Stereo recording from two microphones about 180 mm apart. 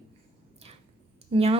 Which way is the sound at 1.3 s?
30° right (ahead or behind).